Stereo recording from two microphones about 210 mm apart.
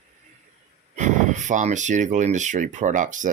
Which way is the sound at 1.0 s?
35° right (ahead or behind).